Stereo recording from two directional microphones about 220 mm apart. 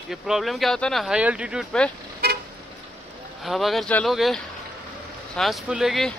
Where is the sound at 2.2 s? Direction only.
45° right (ahead or behind).